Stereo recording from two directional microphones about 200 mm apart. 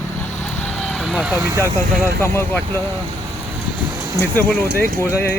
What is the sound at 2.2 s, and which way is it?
Speech, 10° left (ahead or behind).